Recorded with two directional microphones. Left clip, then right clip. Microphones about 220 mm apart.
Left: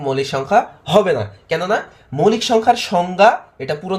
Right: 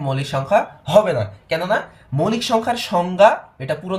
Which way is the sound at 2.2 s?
35° left (ahead or behind).